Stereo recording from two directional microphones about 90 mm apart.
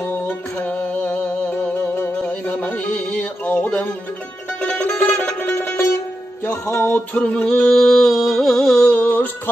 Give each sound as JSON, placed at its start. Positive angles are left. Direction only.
{"t": 0.6, "sound": "music", "side_deg": 15}
{"t": 5.6, "sound": "music", "side_deg": 25}
{"t": 7.2, "sound": "music", "side_deg": 15}